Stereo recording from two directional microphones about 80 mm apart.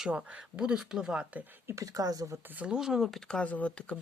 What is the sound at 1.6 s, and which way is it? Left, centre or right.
Speech, right.